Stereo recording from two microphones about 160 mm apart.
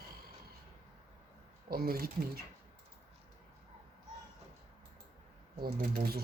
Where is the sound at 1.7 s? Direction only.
70° right (ahead or behind).